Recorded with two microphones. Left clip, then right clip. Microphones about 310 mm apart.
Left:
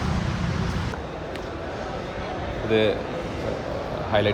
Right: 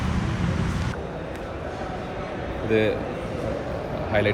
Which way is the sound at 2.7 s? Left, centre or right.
Centre.